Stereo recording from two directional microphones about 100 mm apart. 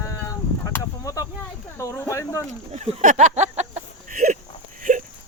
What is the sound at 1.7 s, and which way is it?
Speech, 30° left (ahead or behind).